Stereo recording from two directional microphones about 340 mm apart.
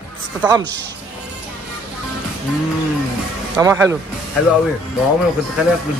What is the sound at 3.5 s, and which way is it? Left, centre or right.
Speech, centre.